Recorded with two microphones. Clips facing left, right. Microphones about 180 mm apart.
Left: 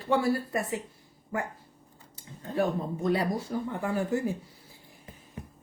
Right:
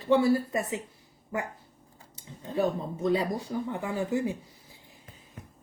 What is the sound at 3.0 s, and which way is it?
A woman's voice, 20° right (ahead or behind).